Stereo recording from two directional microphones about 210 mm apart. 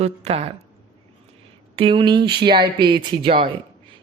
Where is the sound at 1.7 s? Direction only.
25° right (ahead or behind).